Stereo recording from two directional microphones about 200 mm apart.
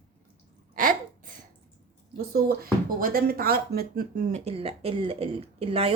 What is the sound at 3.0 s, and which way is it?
Speech, 45° right (ahead or behind).